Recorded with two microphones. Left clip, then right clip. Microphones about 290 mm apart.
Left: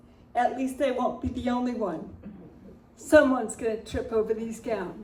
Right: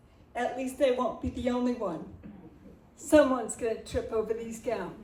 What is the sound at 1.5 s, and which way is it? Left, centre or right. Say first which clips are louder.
Speech: left 2 dB; centre.